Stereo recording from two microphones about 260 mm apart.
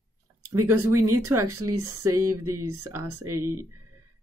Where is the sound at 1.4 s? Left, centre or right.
Right.